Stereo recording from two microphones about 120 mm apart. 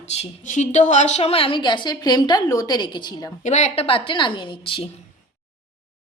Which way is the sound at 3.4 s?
75° left (ahead or behind).